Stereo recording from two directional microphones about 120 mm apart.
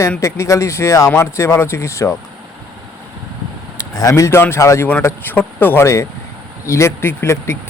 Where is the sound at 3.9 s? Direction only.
25° left (ahead or behind).